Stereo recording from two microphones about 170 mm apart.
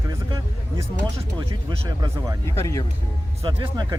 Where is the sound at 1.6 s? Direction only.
25° right (ahead or behind).